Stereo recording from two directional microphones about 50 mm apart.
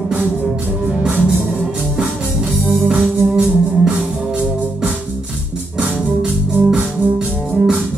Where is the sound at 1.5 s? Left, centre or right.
Centre.